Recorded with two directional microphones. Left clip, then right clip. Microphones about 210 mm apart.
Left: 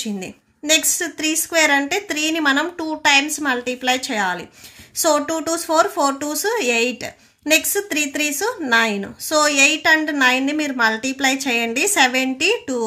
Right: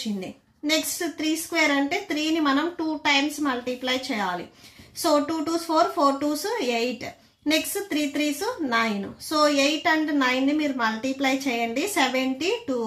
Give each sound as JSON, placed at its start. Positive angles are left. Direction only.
{"t": 0.7, "sound": "speech", "side_deg": 50}